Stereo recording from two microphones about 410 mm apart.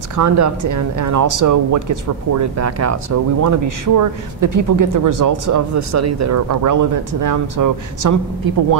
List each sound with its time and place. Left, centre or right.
0.1 s speech: right